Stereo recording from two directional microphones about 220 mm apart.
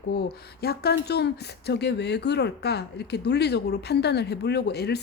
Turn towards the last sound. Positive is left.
turn(degrees=45)  # may be behind; listen again after turning